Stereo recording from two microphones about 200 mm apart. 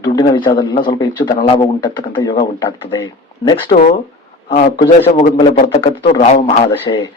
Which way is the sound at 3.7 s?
30° left (ahead or behind).